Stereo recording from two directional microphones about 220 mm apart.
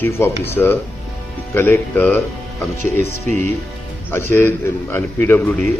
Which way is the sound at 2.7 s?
35° right (ahead or behind).